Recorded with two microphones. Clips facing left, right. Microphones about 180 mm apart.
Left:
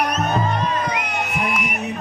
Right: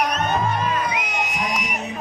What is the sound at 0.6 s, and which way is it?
Music, 5° right (ahead or behind).